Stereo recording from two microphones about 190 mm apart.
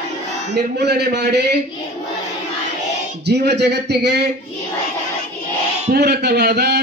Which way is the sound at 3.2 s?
65° right (ahead or behind).